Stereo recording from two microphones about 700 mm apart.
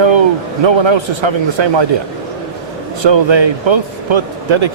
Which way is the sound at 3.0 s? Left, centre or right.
Right.